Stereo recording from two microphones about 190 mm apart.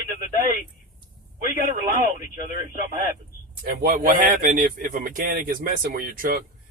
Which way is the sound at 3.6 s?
50° right (ahead or behind).